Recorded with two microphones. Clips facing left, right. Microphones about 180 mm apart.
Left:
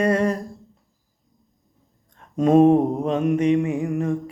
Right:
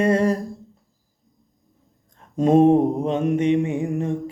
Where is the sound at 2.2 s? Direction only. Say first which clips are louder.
Even; 30° right (ahead or behind).